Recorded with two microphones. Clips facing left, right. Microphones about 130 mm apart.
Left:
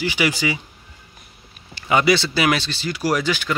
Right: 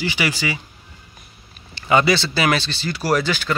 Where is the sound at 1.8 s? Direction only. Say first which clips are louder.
Even; 10° left (ahead or behind).